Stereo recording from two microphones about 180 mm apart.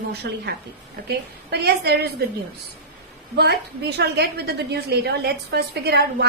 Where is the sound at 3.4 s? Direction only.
65° right (ahead or behind).